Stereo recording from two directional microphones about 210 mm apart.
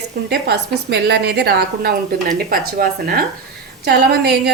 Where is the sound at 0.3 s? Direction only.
50° right (ahead or behind).